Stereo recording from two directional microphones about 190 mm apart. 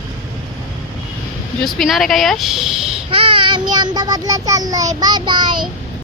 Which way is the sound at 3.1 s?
25° right (ahead or behind).